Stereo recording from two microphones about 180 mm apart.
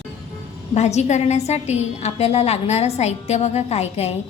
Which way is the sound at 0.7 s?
40° left (ahead or behind).